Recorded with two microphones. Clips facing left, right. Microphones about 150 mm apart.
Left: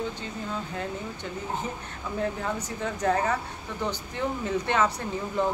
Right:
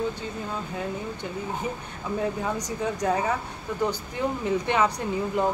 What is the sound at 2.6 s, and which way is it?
Speech, 10° right (ahead or behind).